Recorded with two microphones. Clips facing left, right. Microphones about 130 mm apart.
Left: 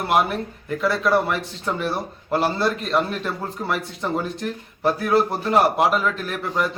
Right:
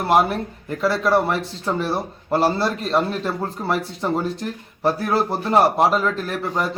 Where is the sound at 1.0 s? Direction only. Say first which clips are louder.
Right 2 dB; 30° right (ahead or behind).